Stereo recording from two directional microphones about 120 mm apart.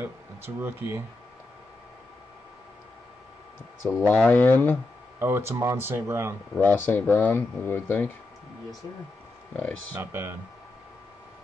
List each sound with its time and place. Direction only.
0.6 s speech: 20° right (ahead or behind)
3.8 s speech: 15° left (ahead or behind)
5.2 s speech: 20° right (ahead or behind)
6.6 s speech: 15° left (ahead or behind)
9.9 s speech: 20° right (ahead or behind)